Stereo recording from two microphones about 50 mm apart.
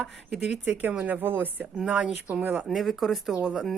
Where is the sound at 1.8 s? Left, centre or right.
Centre.